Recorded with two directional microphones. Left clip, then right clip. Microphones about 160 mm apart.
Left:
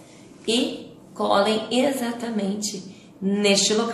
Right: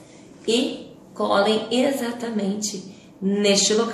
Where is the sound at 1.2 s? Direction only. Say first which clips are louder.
Right 1 dB; 15° left (ahead or behind).